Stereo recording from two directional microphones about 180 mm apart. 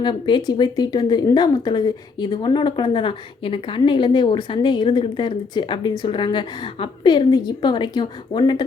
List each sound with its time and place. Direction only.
0.0 s a woman's voice: 25° left (ahead or behind)